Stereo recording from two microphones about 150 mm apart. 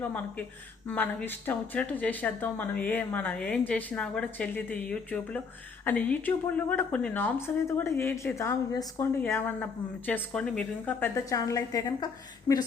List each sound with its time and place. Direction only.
0.0 s a woman's voice: 10° left (ahead or behind)